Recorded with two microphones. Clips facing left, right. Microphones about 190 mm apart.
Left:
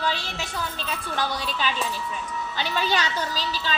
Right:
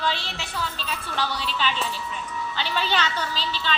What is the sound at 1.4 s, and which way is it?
Speech, 45° left (ahead or behind).